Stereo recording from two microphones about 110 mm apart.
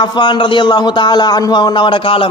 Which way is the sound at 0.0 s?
45° left (ahead or behind).